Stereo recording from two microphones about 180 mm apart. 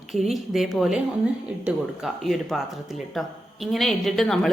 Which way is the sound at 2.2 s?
Centre (ahead or behind).